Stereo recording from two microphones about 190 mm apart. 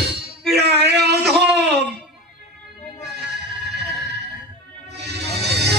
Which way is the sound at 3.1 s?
60° right (ahead or behind).